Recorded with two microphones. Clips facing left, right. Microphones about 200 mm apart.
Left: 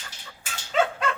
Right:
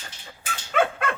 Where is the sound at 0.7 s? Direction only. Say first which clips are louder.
Right 1 dB; 55° right (ahead or behind).